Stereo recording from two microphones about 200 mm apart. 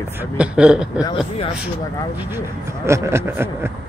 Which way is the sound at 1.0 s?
25° left (ahead or behind).